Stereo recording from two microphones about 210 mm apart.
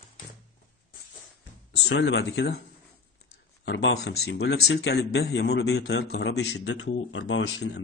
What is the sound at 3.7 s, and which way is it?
Speech, 55° left (ahead or behind).